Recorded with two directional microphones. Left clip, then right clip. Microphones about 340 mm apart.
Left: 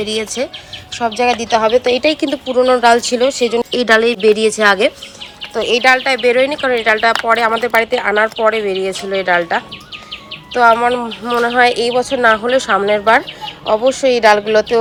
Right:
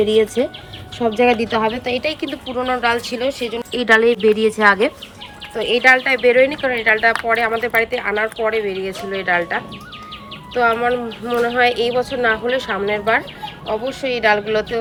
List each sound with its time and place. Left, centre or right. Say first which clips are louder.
0.0 s speech: right 3 dB; centre